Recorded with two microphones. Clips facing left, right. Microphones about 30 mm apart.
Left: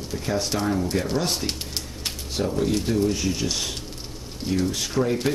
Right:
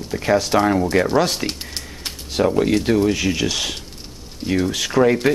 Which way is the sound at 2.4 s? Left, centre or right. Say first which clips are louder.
Right 7 dB; right.